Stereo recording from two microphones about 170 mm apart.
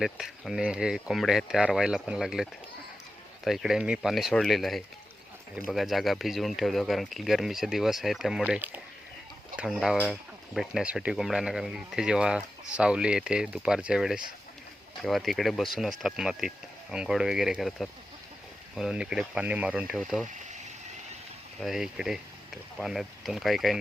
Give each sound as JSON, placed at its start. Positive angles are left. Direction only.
{"t": 0.0, "sound": "speech", "side_deg": 0}
{"t": 20.2, "sound": "speech", "side_deg": -45}
{"t": 21.6, "sound": "speech", "side_deg": 0}